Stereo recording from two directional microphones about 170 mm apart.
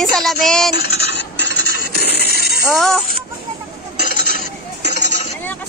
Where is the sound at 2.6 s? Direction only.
Centre (ahead or behind).